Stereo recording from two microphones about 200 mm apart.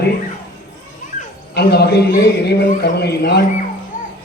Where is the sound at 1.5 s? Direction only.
55° left (ahead or behind).